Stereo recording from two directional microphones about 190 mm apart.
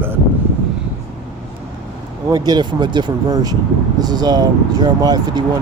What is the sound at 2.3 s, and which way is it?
Speech, 20° right (ahead or behind).